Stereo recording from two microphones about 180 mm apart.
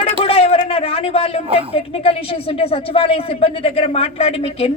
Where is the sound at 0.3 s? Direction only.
30° left (ahead or behind).